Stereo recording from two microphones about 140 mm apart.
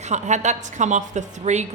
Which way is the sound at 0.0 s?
55° right (ahead or behind).